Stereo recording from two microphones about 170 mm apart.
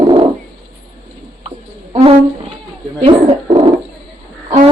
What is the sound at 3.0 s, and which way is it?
Bird, 35° right (ahead or behind).